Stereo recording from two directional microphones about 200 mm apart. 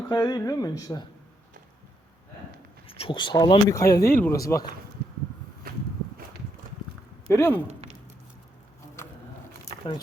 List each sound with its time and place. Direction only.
0.1 s speech: 20° left (ahead or behind)
2.8 s speech: 30° left (ahead or behind)
7.3 s speech: 10° left (ahead or behind)
9.7 s a sound: 50° right (ahead or behind)